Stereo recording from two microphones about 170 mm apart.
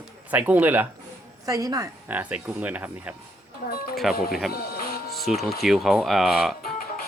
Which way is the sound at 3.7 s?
60° left (ahead or behind).